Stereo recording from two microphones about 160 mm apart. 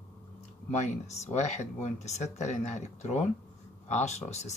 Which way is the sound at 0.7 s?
45° left (ahead or behind).